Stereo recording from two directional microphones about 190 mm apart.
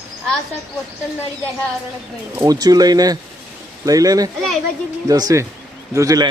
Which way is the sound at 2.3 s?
20° right (ahead or behind).